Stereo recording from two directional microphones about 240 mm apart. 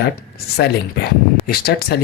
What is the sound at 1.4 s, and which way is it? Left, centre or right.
Speech, left.